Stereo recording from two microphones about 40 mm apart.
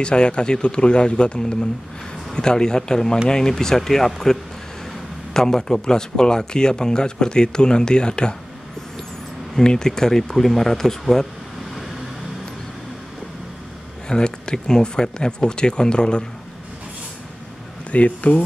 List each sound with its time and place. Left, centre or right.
0.0 s a man's voice: left
9.6 s speech: centre
10.2 s speech: centre
14.0 s a man's voice: centre
17.9 s speech: left